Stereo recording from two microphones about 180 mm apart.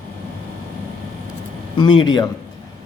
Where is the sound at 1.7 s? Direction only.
25° left (ahead or behind).